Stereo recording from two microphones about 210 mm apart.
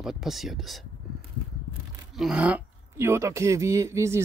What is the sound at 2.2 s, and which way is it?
Speech, 5° right (ahead or behind).